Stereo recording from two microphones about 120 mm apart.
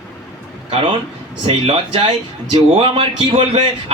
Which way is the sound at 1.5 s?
55° right (ahead or behind).